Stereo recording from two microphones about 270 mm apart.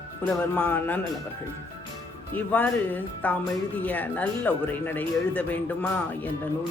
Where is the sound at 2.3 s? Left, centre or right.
Centre.